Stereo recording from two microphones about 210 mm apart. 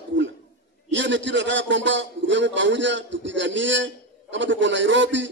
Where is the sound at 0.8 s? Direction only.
60° right (ahead or behind).